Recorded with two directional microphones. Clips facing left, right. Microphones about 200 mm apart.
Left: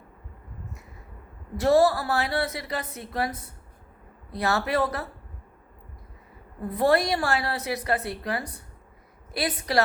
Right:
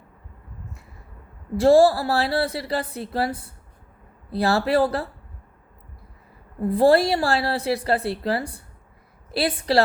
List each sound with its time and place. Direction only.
1.5 s a woman's voice: 30° right (ahead or behind)
6.6 s a woman's voice: 30° right (ahead or behind)